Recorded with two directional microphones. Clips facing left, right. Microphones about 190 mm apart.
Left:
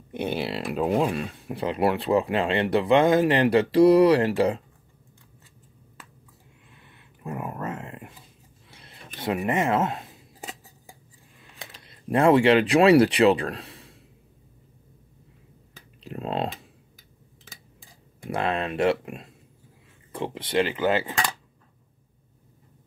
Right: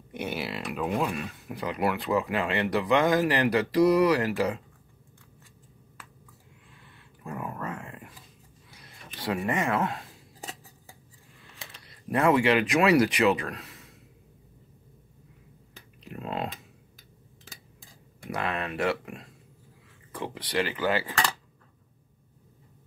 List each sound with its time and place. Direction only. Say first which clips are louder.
0.1 s speech: left 5 dB; 30° left (ahead or behind)
6.8 s a sound: left 4 dB; 20° left (ahead or behind)
9.5 s scissors: left 4 dB; 20° left (ahead or behind)
11.5 s speech: left 4 dB; 25° left (ahead or behind)
16.0 s computer keyboard: left 5 dB; 30° left (ahead or behind)
18.3 s speech: left 5 dB; 25° left (ahead or behind)